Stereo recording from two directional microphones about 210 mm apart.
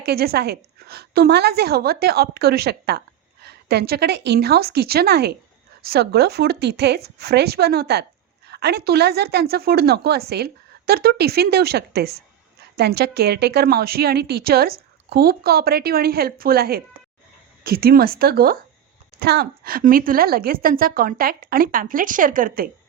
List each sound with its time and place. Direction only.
0.0 s a woman's voice: 50° right (ahead or behind)